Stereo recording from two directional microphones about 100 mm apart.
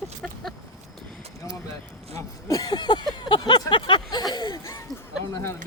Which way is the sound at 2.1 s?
35° left (ahead or behind).